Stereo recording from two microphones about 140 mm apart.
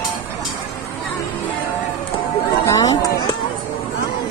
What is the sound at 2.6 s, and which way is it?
Chatter, 25° left (ahead or behind).